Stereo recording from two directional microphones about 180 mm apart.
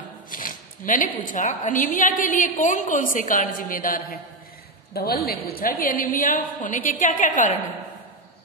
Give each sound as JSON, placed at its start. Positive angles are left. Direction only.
{"t": 0.3, "sound": "a woman's voice", "side_deg": 50}